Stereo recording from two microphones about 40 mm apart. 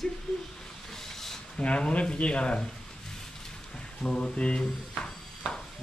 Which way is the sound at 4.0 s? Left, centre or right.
Centre.